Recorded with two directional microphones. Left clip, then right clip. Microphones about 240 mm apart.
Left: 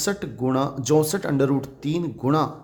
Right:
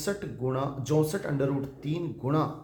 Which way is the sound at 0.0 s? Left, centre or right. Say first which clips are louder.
Left 6 dB; left.